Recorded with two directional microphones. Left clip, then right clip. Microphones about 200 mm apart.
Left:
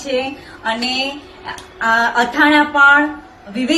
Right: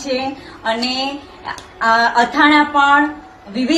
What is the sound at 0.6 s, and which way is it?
A woman's voice, centre (ahead or behind).